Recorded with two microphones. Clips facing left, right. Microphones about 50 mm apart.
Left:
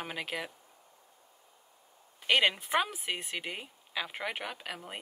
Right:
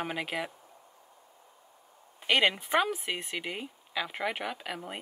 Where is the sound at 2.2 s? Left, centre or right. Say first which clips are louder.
Right 1 dB; centre.